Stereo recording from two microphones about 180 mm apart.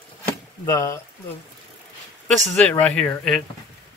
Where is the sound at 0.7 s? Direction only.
15° left (ahead or behind).